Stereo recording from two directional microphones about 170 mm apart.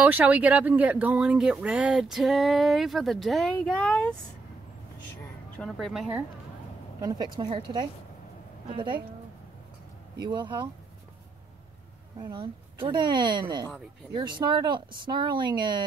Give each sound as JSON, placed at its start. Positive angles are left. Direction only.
{"t": 0.0, "sound": "speech", "side_deg": -10}
{"t": 5.6, "sound": "speech", "side_deg": 0}
{"t": 7.0, "sound": "speech", "side_deg": -25}
{"t": 10.1, "sound": "speech", "side_deg": -25}
{"t": 12.2, "sound": "speech", "side_deg": -25}